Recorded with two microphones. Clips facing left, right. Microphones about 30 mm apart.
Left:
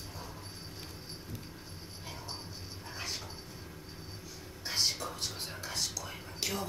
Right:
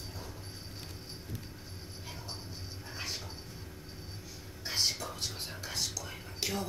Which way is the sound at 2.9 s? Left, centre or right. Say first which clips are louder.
Even; centre.